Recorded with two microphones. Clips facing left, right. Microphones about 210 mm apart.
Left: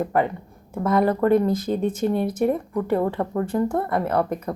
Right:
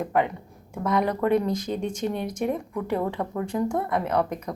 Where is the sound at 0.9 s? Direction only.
50° left (ahead or behind).